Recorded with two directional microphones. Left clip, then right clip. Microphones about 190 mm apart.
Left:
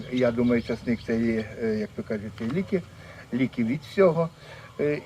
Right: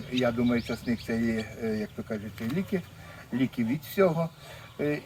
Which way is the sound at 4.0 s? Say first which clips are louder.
Left 4 dB; 10° left (ahead or behind).